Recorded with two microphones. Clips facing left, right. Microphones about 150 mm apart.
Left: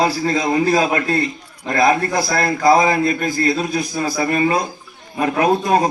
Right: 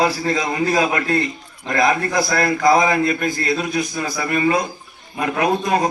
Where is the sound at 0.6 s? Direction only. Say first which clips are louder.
Left 2 dB; 35° left (ahead or behind).